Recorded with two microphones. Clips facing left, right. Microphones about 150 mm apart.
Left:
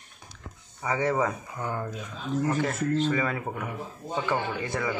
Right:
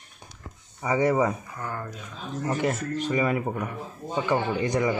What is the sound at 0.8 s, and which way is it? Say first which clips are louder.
Speech: right 4 dB; 15° right (ahead or behind).